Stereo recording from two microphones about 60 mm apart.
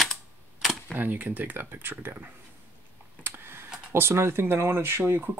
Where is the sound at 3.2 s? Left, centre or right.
Right.